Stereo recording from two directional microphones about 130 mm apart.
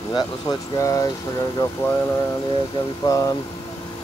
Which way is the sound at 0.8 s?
25° left (ahead or behind).